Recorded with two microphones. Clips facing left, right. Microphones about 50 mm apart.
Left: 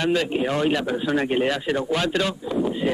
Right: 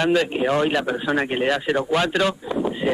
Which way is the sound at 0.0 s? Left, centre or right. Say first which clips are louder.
Right 2 dB; centre.